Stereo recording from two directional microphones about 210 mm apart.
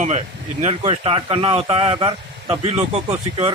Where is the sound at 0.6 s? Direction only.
30° right (ahead or behind).